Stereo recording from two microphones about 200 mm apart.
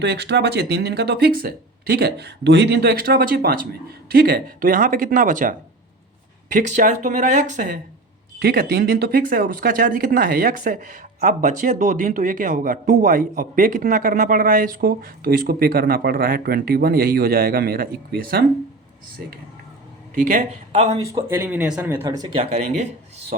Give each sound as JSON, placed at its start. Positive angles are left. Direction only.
{"t": 0.0, "sound": "speech", "side_deg": -60}
{"t": 21.1, "sound": "speech", "side_deg": -15}